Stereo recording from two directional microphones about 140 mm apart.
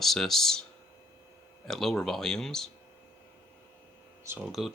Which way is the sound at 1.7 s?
5° left (ahead or behind).